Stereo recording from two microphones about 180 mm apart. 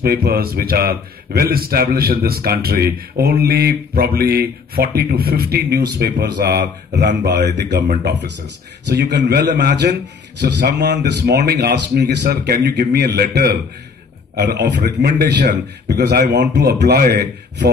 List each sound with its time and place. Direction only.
0.0 s a man's voice: 60° right (ahead or behind)